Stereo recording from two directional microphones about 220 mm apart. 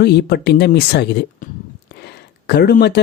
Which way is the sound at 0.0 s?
50° left (ahead or behind).